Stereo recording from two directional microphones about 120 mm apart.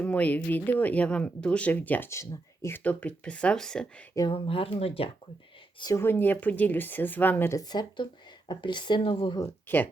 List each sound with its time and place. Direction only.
0.0 s speech: 10° left (ahead or behind)
4.3 s speech: 50° left (ahead or behind)
6.0 s speech: 15° left (ahead or behind)
7.7 s speech: 35° left (ahead or behind)
9.4 s speech: 15° left (ahead or behind)